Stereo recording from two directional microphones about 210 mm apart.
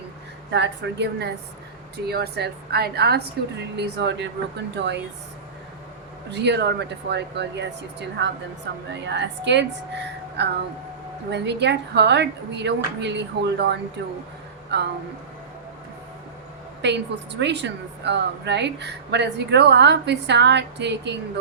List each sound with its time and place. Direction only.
0.5 s a woman's voice: 55° right (ahead or behind)
6.3 s speech: 55° right (ahead or behind)
16.8 s speech: 55° right (ahead or behind)